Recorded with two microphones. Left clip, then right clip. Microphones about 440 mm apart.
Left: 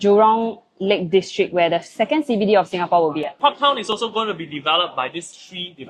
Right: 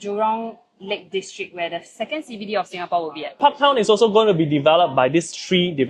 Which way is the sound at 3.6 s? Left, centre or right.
Right.